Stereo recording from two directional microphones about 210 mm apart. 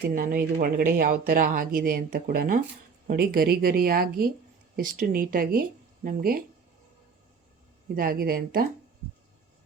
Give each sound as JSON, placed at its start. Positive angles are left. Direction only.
{"t": 0.0, "sound": "speech", "side_deg": -45}
{"t": 7.9, "sound": "speech", "side_deg": -45}